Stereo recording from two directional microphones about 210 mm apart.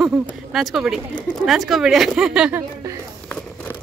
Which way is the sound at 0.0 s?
Centre (ahead or behind).